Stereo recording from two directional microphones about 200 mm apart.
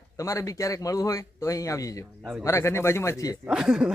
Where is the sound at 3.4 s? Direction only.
5° right (ahead or behind).